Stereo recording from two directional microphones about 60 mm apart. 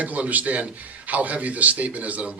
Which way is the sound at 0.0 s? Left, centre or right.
Right.